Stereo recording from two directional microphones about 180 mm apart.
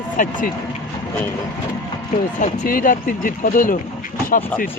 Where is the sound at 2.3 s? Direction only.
50° left (ahead or behind).